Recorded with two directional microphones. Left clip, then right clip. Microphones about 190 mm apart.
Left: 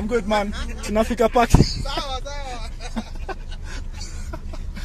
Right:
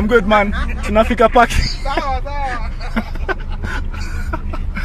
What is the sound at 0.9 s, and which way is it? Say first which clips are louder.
Speech: right 7 dB; 25° left (ahead or behind).